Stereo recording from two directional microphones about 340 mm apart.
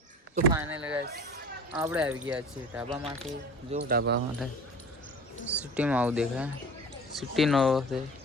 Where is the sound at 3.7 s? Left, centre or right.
Right.